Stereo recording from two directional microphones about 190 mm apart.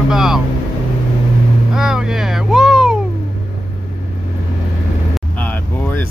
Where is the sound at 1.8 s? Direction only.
5° right (ahead or behind).